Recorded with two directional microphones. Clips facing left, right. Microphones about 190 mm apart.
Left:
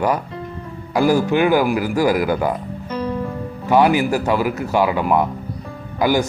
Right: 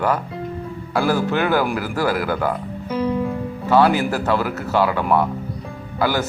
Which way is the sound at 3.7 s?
15° left (ahead or behind).